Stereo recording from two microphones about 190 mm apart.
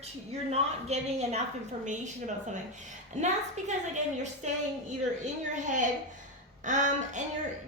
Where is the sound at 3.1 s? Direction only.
40° right (ahead or behind).